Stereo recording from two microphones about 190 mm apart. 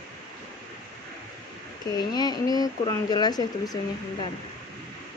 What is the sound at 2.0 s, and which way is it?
A woman's voice, 20° left (ahead or behind).